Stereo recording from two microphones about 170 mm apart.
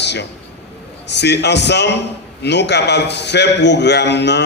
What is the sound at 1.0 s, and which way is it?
A man's voice, 90° left.